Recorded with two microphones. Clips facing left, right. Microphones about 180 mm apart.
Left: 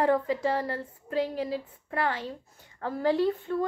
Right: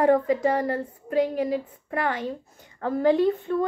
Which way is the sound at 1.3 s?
15° right (ahead or behind).